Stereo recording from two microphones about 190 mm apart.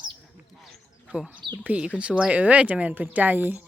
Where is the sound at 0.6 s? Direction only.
Centre (ahead or behind).